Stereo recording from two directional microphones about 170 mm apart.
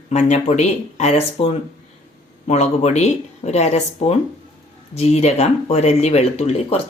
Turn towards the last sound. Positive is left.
turn(degrees=40)  # may be behind; listen again after turning